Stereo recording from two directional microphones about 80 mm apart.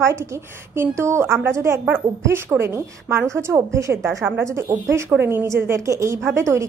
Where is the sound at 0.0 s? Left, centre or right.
Right.